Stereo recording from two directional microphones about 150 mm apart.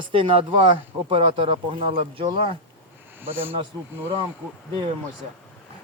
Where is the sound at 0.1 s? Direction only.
35° right (ahead or behind).